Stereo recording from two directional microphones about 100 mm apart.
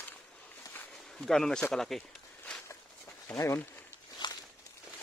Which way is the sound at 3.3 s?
30° left (ahead or behind).